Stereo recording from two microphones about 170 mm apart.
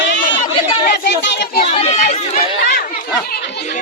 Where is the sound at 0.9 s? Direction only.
80° left.